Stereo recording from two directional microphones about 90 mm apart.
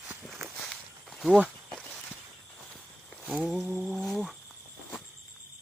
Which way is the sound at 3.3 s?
5° right (ahead or behind).